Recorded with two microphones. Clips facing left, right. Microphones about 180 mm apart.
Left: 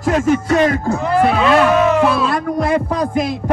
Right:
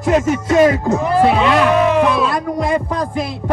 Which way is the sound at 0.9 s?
20° right (ahead or behind).